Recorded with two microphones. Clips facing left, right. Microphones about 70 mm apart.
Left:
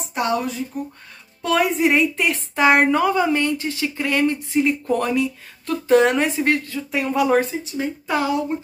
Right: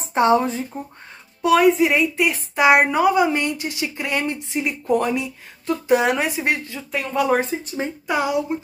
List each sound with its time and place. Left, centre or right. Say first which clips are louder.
0.1 s speech: right 6 dB; right
1.6 s a woman's voice: left 2 dB; centre
5.9 s a woman's voice: left 6 dB; centre
6.9 s speech: left 1 dB; centre
7.3 s speech: left 2 dB; right
8.1 s a woman's voice: even; centre